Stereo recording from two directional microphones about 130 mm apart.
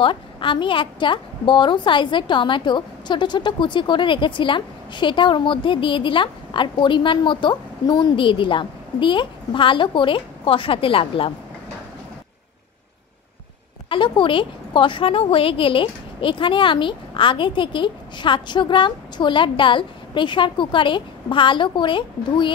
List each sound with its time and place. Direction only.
0.0 s a woman's voice: 40° left (ahead or behind)
13.8 s a woman's voice: 40° left (ahead or behind)